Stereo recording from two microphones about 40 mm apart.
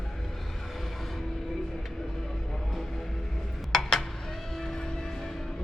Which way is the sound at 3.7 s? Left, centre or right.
Centre.